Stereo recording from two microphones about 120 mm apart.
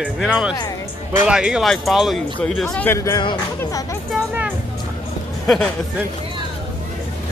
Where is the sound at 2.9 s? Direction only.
25° left (ahead or behind).